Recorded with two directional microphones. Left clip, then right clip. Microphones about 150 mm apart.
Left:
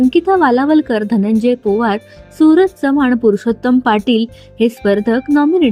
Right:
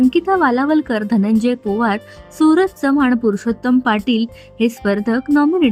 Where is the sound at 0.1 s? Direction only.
10° left (ahead or behind).